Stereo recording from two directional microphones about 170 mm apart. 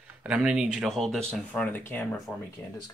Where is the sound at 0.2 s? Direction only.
5° right (ahead or behind); by 2.0 s 10° left (ahead or behind).